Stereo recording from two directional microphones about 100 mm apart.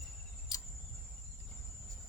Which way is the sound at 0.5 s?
40° left (ahead or behind).